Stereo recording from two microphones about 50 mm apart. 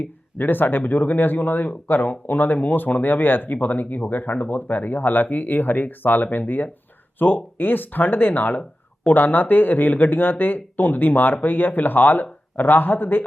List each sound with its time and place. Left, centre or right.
0.0 s speech: left